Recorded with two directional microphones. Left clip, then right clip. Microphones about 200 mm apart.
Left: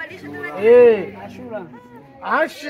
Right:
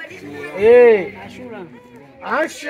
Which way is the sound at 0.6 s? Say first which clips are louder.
Right 1 dB; 50° right (ahead or behind).